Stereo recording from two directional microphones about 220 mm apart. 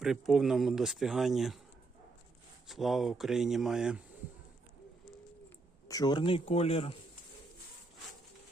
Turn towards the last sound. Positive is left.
turn(degrees=25)  # may be behind; listen again after turning